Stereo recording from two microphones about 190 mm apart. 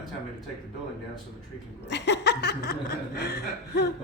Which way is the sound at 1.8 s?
65° left (ahead or behind).